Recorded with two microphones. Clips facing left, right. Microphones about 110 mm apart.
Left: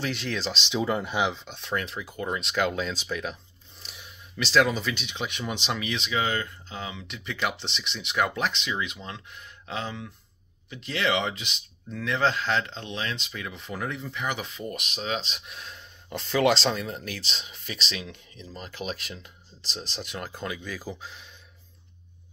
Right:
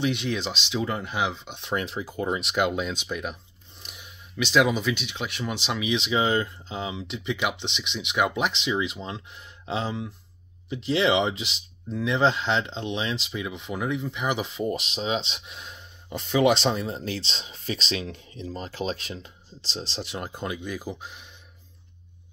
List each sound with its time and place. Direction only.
0.0 s speech: 10° right (ahead or behind)
1.5 s speech: 20° right (ahead or behind)
5.9 s speech: 25° right (ahead or behind)
7.3 s speech: 10° right (ahead or behind)
14.2 s speech: 25° right (ahead or behind)
20.0 s speech: 20° right (ahead or behind)